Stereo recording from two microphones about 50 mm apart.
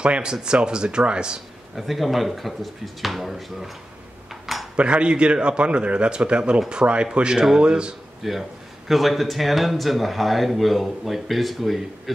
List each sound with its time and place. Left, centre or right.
0.0 s speech: centre
1.8 s speech: centre
4.3 s cutlery: centre
4.7 s a man's voice: right
8.2 s speech: centre